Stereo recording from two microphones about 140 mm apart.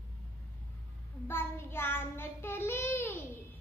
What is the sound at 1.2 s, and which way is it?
Child singing, 15° left (ahead or behind).